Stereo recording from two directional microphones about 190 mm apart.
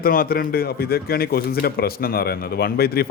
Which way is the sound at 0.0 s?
50° left (ahead or behind).